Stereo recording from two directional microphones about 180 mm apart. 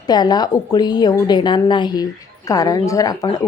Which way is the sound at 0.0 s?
20° left (ahead or behind).